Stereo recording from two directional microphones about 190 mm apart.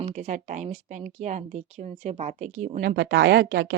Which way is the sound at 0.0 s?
35° right (ahead or behind).